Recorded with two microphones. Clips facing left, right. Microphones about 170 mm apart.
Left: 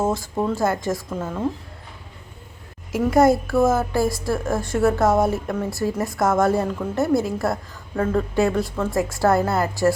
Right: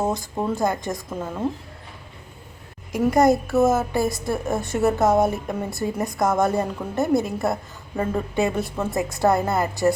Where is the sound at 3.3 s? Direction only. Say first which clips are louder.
Even; 20° right (ahead or behind).